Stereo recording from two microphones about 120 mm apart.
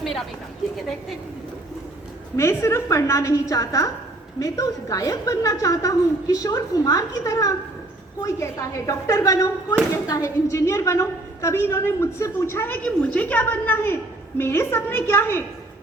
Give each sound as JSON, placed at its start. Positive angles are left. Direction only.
{"t": 0.0, "sound": "a woman's voice", "side_deg": 0}
{"t": 2.3, "sound": "a woman's voice", "side_deg": 20}